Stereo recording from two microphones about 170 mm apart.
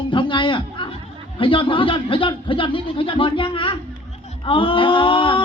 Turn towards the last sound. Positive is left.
turn(degrees=30)  # may be behind; listen again after turning